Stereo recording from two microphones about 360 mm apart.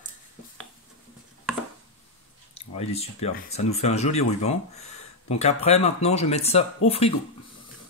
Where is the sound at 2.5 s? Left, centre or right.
Centre.